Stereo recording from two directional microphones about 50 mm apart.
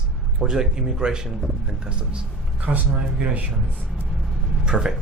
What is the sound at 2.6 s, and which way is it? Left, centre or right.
Speech, right.